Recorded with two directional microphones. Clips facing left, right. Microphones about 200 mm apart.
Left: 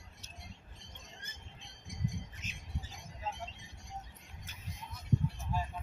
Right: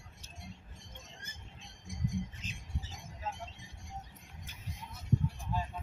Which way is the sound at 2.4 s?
30° right (ahead or behind).